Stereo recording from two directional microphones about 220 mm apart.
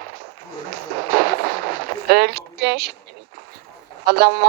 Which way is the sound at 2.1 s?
45° right (ahead or behind).